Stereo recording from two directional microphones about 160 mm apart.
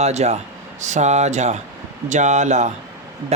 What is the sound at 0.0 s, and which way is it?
Speech, 45° right (ahead or behind).